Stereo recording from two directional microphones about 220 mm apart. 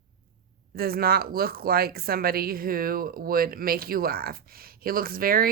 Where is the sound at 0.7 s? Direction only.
45° right (ahead or behind).